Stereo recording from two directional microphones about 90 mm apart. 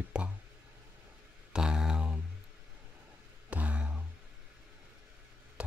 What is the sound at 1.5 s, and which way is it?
Mantra, 5° right (ahead or behind).